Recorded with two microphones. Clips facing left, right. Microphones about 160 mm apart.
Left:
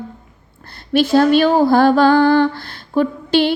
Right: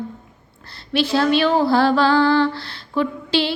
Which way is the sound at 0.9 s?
45° left (ahead or behind).